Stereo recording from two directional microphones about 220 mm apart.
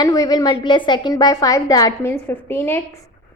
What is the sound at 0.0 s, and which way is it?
A woman's voice, 15° left (ahead or behind).